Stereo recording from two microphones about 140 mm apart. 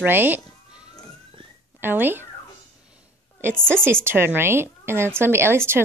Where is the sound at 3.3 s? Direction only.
15° right (ahead or behind).